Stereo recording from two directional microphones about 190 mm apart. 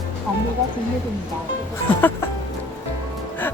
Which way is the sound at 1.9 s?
10° left (ahead or behind).